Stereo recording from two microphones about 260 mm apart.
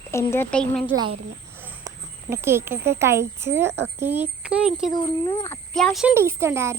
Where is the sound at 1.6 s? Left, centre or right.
Centre.